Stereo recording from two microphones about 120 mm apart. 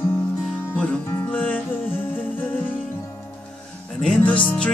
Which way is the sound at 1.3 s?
15° left (ahead or behind).